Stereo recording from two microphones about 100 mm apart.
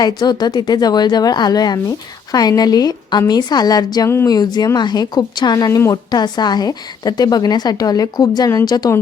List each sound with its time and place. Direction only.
0.0 s speech: 45° left (ahead or behind)